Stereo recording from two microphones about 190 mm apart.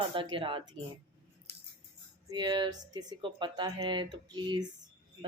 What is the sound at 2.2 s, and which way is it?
A woman's voice, 20° right (ahead or behind).